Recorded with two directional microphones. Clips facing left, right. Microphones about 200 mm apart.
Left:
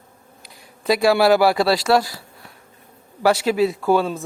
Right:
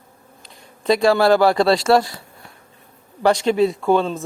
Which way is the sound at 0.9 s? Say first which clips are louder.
Right 1 dB; 5° left (ahead or behind).